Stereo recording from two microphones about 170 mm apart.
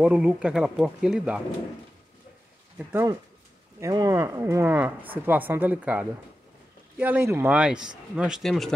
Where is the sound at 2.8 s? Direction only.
15° right (ahead or behind).